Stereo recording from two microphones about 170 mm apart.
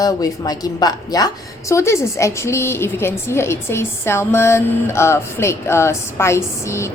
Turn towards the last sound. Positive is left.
turn(degrees=15)  # may be behind; listen again after turning